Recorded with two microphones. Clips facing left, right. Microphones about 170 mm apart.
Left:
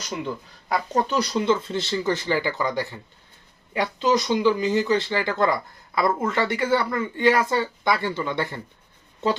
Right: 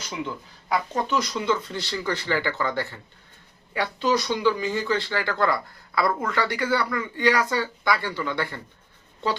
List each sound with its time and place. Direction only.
0.7 s speech: 35° left (ahead or behind)